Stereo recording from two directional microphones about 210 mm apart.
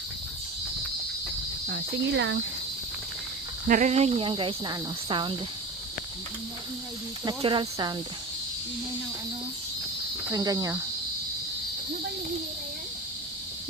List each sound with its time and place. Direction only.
1.6 s speech: 50° right (ahead or behind)
3.7 s speech: 35° right (ahead or behind)
7.3 s speech: 25° right (ahead or behind)
10.3 s speech: 15° right (ahead or behind)